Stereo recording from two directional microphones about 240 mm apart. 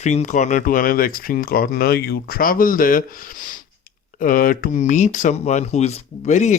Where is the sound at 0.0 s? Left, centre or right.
Left.